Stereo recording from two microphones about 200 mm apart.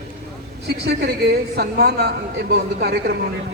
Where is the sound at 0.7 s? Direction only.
55° right (ahead or behind).